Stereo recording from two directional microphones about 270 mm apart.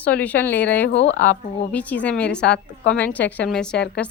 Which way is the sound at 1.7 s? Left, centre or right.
Centre.